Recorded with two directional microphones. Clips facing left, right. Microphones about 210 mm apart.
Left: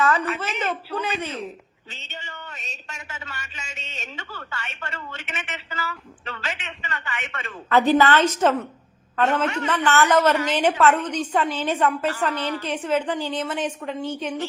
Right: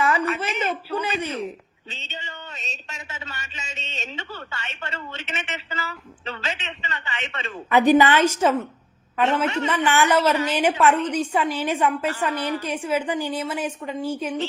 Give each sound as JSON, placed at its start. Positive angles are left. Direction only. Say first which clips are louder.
{"t": 0.0, "sound": "a woman's voice", "louder": "even", "side_deg": -10}
{"t": 1.9, "sound": "a sound", "louder": "right 2 dB", "side_deg": -20}
{"t": 9.1, "sound": "a woman's voice", "louder": "even", "side_deg": -10}